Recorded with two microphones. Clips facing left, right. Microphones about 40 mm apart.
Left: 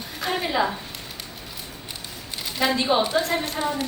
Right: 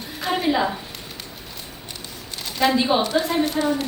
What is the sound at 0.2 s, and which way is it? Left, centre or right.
Speech, centre.